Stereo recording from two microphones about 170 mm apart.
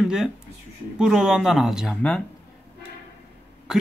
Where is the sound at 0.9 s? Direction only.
5° right (ahead or behind).